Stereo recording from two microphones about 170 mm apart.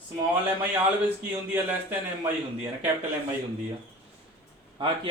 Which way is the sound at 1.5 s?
10° right (ahead or behind).